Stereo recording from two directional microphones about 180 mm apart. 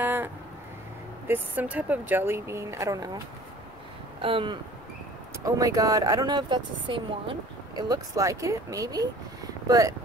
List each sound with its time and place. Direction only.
0.0 s vehicle: 10° right (ahead or behind)
1.2 s speech: 10° right (ahead or behind)
4.2 s speech: 30° right (ahead or behind)
5.4 s speech: 20° right (ahead or behind)